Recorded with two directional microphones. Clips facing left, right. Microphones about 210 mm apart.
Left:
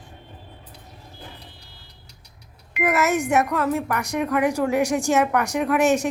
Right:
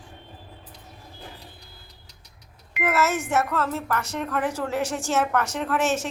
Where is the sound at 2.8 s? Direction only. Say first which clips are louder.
Left 3 dB; 15° left (ahead or behind).